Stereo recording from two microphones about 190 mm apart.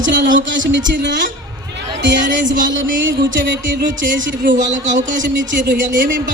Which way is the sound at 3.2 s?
70° right (ahead or behind).